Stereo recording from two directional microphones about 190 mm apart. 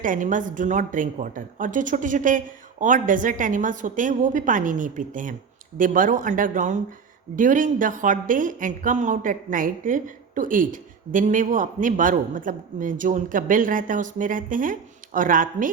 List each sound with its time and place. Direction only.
0.0 s a woman's voice: 45° right (ahead or behind)